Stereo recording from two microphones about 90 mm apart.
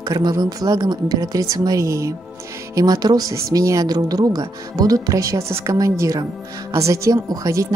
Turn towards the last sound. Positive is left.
turn(degrees=-40)  # may be behind; listen again after turning